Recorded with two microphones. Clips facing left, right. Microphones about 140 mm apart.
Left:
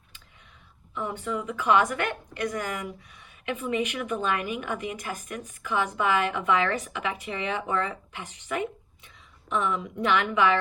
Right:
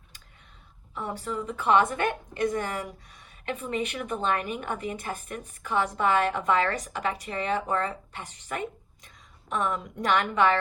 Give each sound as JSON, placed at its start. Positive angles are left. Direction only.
{"t": 0.9, "sound": "a woman's voice", "side_deg": -35}